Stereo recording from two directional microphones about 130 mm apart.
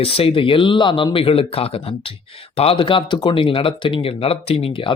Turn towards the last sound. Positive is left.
turn(degrees=45)  # may be behind; listen again after turning